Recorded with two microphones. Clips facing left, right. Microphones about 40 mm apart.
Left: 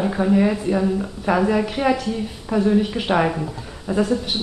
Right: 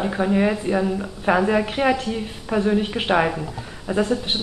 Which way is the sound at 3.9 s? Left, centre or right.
Right.